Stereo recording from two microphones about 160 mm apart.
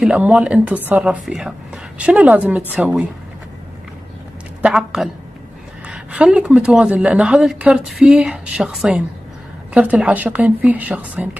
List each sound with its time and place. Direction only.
0.0 s speech: 5° right (ahead or behind)
4.6 s a woman's voice: 5° right (ahead or behind)